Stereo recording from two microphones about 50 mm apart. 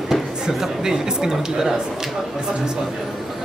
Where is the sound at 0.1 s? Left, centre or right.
Centre.